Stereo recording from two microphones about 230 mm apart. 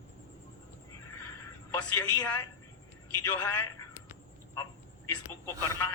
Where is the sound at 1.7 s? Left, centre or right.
Centre.